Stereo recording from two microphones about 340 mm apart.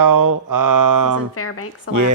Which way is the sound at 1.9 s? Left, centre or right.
Left.